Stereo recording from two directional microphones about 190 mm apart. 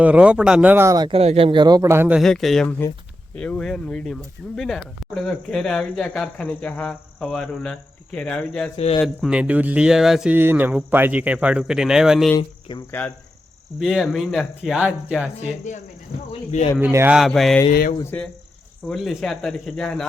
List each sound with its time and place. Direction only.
0.0 s speech: 5° right (ahead or behind)
8.7 s speech: 30° left (ahead or behind)
9.0 s speech: 5° right (ahead or behind)
12.4 s cricket: 25° left (ahead or behind)
13.7 s speech: centre (ahead or behind)
15.7 s speech: 40° left (ahead or behind)
16.9 s speech: 15° right (ahead or behind)
17.2 s speech: centre (ahead or behind)
18.9 s speech: centre (ahead or behind)